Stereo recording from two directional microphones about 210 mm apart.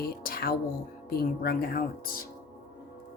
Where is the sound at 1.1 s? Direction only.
50° left (ahead or behind).